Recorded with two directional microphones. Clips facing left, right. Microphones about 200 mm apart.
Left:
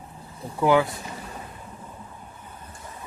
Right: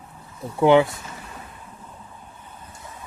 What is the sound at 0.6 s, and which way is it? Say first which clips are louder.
Speech: right 4 dB; 25° right (ahead or behind).